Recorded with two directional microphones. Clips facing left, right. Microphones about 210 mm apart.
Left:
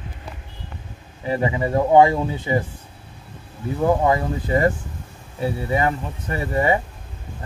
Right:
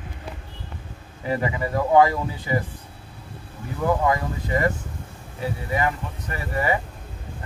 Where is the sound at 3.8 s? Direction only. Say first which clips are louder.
Left 3 dB; 30° left (ahead or behind).